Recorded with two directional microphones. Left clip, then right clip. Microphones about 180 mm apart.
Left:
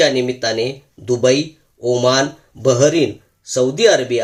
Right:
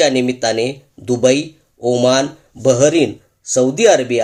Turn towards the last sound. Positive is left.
turn(degrees=-30)  # may be behind; listen again after turning